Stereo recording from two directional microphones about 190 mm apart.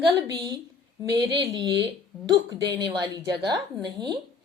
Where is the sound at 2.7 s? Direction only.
20° right (ahead or behind).